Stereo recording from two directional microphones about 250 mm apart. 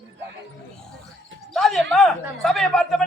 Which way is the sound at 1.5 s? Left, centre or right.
Centre.